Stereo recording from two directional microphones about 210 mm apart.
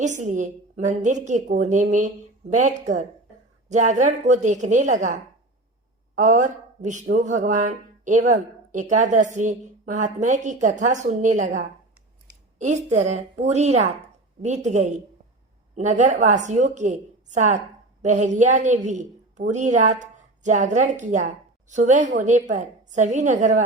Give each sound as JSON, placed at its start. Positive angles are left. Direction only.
{"t": 0.0, "sound": "a woman's voice", "side_deg": -35}